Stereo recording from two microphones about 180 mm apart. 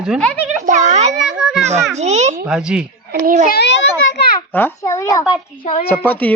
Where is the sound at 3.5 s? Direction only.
70° left (ahead or behind).